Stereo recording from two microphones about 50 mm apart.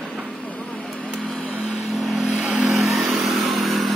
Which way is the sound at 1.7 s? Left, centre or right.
Centre.